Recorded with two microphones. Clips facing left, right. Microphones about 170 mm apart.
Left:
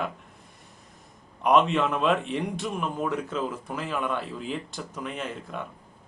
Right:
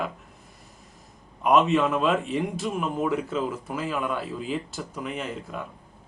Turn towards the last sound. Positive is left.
turn(degrees=-5)  # may be behind; listen again after turning